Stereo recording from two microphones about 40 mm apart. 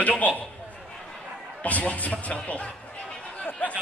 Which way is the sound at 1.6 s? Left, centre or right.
Left.